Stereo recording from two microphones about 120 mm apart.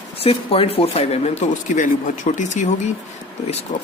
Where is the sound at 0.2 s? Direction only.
55° left (ahead or behind); by 2.9 s 85° left.